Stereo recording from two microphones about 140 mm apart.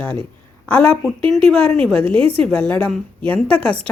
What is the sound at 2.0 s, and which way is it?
Speech, 40° right (ahead or behind).